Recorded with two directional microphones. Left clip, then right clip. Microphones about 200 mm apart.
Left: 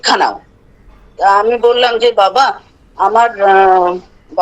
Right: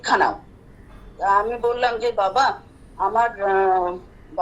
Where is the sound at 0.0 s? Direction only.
60° left (ahead or behind).